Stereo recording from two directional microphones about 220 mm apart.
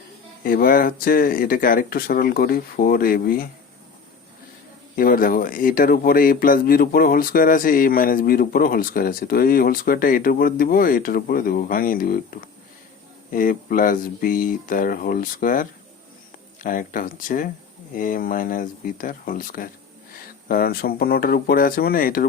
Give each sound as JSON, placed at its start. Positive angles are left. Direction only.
{"t": 0.4, "sound": "speech", "side_deg": 40}
{"t": 4.9, "sound": "speech", "side_deg": 40}
{"t": 16.6, "sound": "speech", "side_deg": 40}